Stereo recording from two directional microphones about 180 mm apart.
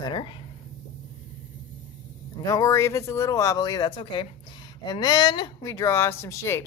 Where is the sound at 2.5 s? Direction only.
20° left (ahead or behind).